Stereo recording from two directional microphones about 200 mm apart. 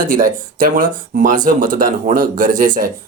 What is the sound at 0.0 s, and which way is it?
Speech, 45° right (ahead or behind).